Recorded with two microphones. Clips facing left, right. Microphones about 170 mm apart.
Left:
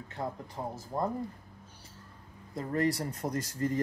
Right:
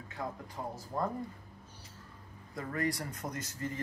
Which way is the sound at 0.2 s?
30° left (ahead or behind).